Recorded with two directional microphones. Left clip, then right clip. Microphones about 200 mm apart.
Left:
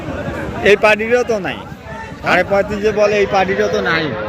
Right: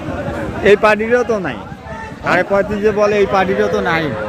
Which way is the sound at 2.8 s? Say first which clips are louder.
Right 1 dB; 55° right (ahead or behind).